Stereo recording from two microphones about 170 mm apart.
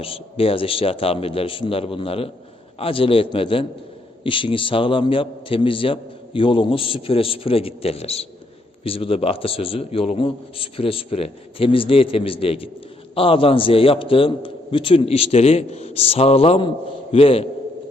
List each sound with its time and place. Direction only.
0.0 s a man's voice: 35° left (ahead or behind)